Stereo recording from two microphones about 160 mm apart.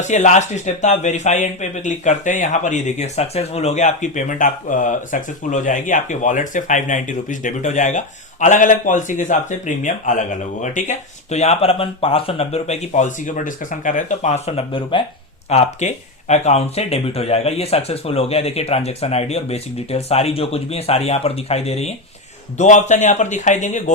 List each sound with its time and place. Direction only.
0.0 s speech: 50° left (ahead or behind); by 15.0 s 30° left (ahead or behind)
15.4 s speech: 45° left (ahead or behind)